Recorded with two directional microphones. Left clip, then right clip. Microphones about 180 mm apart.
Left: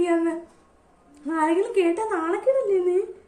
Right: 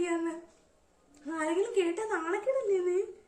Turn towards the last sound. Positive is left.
turn(degrees=15)  # may be behind; listen again after turning